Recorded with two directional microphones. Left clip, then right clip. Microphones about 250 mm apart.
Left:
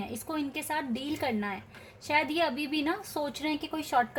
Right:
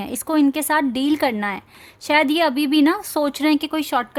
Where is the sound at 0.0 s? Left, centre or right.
Right.